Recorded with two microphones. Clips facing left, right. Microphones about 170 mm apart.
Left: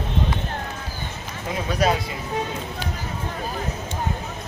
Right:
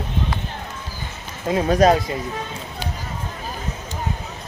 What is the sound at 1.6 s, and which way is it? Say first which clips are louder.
Speech: right 6 dB; 45° right (ahead or behind).